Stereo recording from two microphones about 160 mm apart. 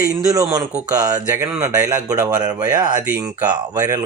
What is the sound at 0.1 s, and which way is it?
Speech, 20° right (ahead or behind).